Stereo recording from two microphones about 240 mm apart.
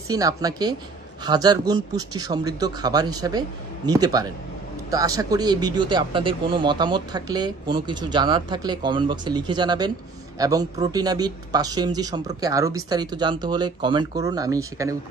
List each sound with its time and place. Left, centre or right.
0.1 s speech: centre